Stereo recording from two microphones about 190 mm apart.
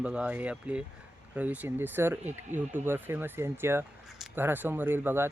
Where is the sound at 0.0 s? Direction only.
5° right (ahead or behind).